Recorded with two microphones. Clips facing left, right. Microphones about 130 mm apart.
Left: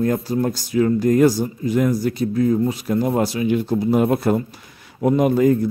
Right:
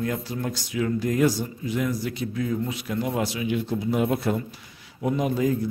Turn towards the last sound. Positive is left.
turn(degrees=60)  # may be behind; listen again after turning